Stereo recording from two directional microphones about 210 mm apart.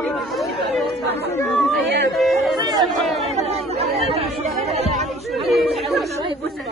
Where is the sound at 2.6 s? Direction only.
20° right (ahead or behind).